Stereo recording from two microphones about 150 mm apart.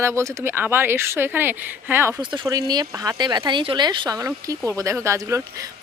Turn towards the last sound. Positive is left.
turn(degrees=-20)  # may be behind; listen again after turning